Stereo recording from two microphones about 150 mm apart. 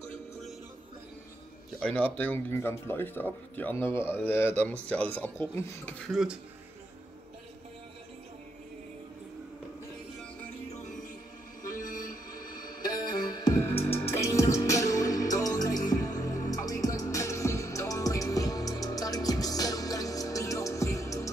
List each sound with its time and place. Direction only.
1.8 s speech: 10° left (ahead or behind)
11.6 s a sound: 25° left (ahead or behind)
12.0 s music: 25° left (ahead or behind)